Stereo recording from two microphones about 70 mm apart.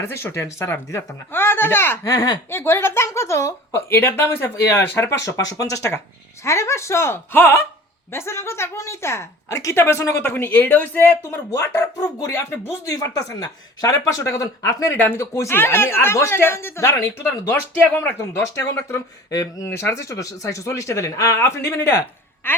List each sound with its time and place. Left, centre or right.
0.0 s speech: left
2.0 s speech: left
2.5 s speech: left
5.0 s speech: left
9.5 s speech: left
9.7 s speech: left
12.3 s speech: left
12.9 s speech: left
14.9 s speech: left
18.5 s speech: left
19.6 s a woman's voice: left